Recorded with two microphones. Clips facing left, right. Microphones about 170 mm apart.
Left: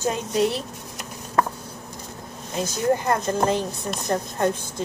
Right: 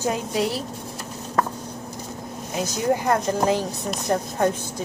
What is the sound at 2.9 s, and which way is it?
Speech, 15° right (ahead or behind).